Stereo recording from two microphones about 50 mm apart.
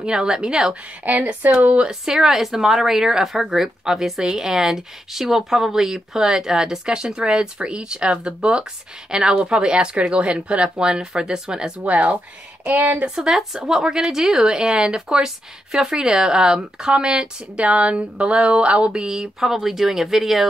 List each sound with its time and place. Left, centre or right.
0.0 s speech: centre
1.0 s speech: right
1.9 s speech: centre; by 12.9 s right
12.9 s speech: centre